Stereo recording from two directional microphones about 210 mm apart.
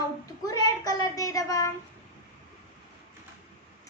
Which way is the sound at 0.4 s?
20° left (ahead or behind).